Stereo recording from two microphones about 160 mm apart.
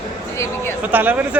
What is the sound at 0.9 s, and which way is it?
Speech, 10° right (ahead or behind).